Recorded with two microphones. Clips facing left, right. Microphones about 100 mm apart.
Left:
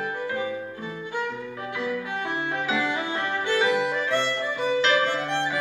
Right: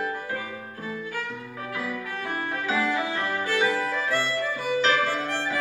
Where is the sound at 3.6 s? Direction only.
20° left (ahead or behind).